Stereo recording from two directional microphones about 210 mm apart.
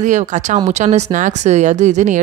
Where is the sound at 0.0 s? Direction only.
35° right (ahead or behind).